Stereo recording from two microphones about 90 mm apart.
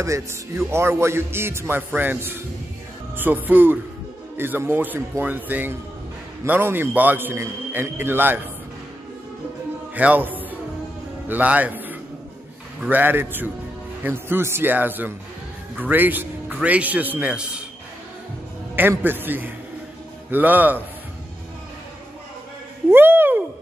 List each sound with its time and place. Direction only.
0.0 s a man's voice: 30° right (ahead or behind)
9.9 s a man's voice: 20° right (ahead or behind)
18.8 s a man's voice: 20° right (ahead or behind)
22.8 s a sound: 25° right (ahead or behind)